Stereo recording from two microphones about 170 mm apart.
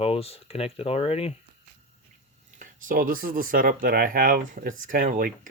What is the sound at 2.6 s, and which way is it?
Speech, 55° right (ahead or behind).